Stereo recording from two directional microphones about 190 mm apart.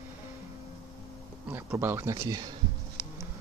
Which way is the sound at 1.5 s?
10° right (ahead or behind).